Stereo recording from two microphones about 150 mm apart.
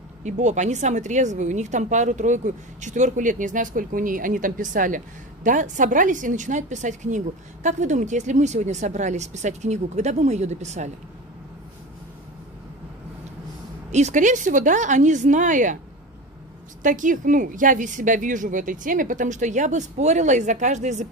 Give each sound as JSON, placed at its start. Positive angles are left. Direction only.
{"t": 0.2, "sound": "speech", "side_deg": -50}
{"t": 13.9, "sound": "a woman's voice", "side_deg": -55}
{"t": 16.8, "sound": "a woman's voice", "side_deg": -60}